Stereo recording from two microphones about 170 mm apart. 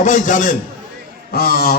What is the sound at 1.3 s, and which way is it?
Speech, 65° left (ahead or behind).